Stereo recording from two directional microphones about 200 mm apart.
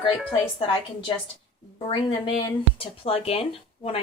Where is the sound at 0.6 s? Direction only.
25° left (ahead or behind).